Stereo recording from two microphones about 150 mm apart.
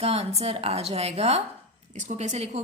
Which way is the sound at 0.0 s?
45° right (ahead or behind).